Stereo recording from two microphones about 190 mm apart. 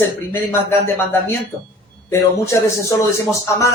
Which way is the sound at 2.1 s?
15° left (ahead or behind).